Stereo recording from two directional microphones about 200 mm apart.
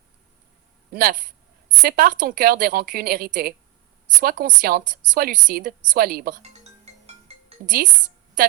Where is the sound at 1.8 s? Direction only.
45° right (ahead or behind).